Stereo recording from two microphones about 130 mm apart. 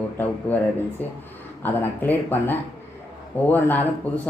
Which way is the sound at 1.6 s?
15° left (ahead or behind).